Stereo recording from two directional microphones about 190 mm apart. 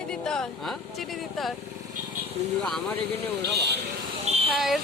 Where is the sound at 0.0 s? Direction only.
5° left (ahead or behind).